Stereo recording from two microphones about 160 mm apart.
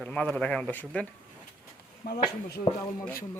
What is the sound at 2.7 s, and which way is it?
Speech, 25° left (ahead or behind).